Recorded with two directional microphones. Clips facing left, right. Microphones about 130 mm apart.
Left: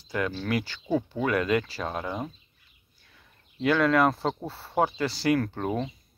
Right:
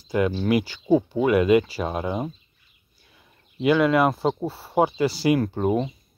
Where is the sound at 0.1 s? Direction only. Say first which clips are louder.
Right 7 dB; 15° right (ahead or behind).